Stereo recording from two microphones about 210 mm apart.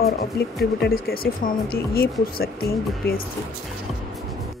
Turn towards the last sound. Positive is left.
turn(degrees=45)  # may be behind; listen again after turning